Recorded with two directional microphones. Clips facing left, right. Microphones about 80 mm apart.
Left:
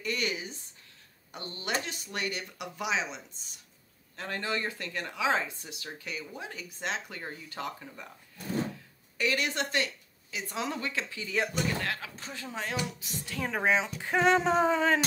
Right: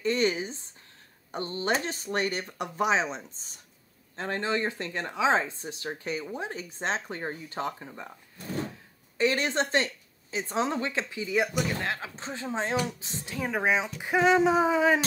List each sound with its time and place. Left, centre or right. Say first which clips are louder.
0.0 s speech: right 7 dB; right
9.2 s speech: right 4 dB; right
13.4 s speech: right 1 dB; centre